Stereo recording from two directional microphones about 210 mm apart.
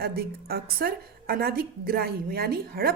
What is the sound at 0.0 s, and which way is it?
A woman's voice, 45° right (ahead or behind).